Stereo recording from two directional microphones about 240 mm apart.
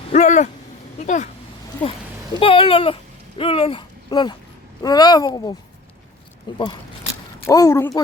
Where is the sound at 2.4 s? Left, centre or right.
Left.